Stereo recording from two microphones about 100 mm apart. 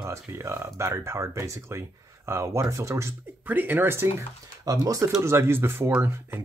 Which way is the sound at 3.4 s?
20° right (ahead or behind).